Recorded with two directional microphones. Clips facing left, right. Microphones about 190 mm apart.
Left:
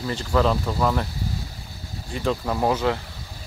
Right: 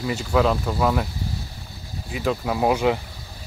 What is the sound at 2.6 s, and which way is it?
Speech, 15° right (ahead or behind).